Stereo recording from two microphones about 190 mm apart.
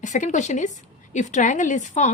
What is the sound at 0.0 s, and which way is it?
A woman's voice, 40° left (ahead or behind).